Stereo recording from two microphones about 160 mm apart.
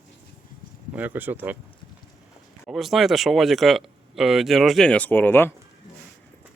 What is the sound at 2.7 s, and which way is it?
Speech, centre (ahead or behind).